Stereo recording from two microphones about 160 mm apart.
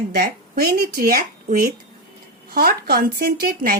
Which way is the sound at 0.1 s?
80° right.